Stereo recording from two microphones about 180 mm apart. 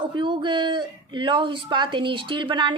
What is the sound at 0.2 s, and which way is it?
A woman's voice, 25° right (ahead or behind).